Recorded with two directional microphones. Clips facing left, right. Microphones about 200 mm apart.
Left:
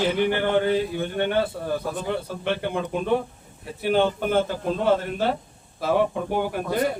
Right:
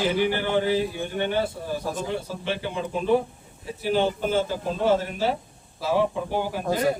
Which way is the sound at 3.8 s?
60° left (ahead or behind).